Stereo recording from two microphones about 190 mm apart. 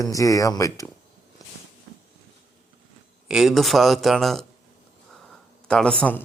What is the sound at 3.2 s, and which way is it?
Speech, centre (ahead or behind).